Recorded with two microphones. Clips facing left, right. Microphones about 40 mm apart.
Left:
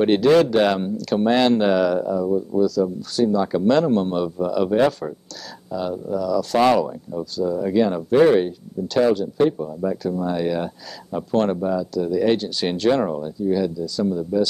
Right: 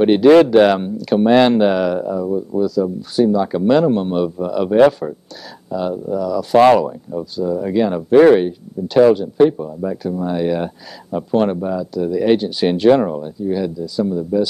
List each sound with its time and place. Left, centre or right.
0.0 s speech: centre